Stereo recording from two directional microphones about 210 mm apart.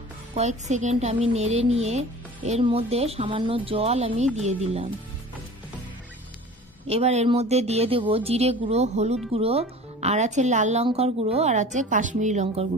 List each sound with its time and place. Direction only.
0.4 s speech: 35° right (ahead or behind)
6.9 s speech: 30° right (ahead or behind)